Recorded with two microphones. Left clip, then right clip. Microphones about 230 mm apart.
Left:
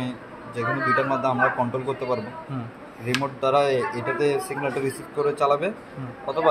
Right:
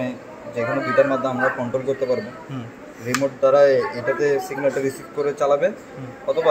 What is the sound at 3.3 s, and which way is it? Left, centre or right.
Speech, left.